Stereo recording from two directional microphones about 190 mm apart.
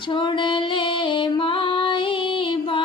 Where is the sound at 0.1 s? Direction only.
25° left (ahead or behind).